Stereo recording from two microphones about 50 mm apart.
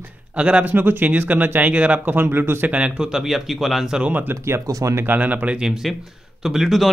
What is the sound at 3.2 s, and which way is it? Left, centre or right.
Speech, centre.